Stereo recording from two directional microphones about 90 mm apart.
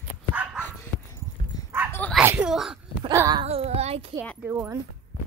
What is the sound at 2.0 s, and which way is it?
Dog, 15° left (ahead or behind).